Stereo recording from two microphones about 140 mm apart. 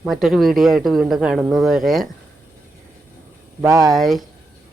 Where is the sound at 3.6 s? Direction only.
25° right (ahead or behind).